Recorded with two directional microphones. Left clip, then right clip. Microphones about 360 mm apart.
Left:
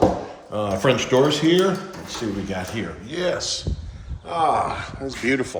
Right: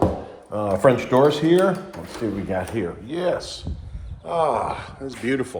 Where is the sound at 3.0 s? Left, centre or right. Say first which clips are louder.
Left 2 dB; centre.